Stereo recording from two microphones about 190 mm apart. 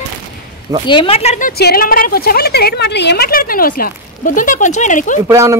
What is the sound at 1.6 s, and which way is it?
A woman's voice, 55° left (ahead or behind).